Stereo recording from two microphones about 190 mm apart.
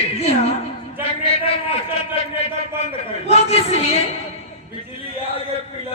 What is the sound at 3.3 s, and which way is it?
Speech, 30° left (ahead or behind).